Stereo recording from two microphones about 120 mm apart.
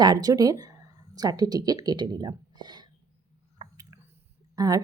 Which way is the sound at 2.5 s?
35° right (ahead or behind).